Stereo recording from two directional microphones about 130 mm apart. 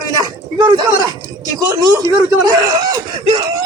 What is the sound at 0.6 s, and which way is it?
Speech, 30° right (ahead or behind).